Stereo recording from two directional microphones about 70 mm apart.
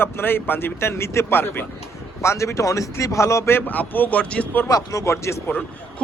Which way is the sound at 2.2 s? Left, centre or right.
Left.